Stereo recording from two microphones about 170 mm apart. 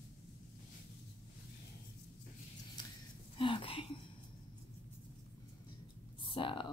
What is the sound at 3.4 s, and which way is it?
Speech, 30° left (ahead or behind).